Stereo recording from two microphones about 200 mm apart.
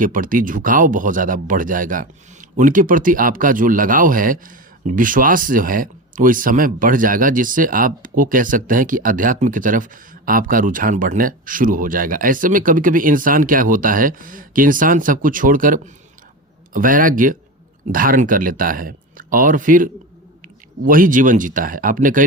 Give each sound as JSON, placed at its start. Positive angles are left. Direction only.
{"t": 0.0, "sound": "speech", "side_deg": -45}